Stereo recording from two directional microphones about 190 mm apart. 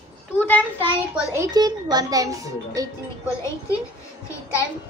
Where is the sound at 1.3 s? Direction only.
20° right (ahead or behind).